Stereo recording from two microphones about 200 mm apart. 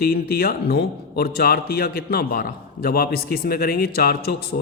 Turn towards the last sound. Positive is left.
turn(degrees=50)  # may be behind; listen again after turning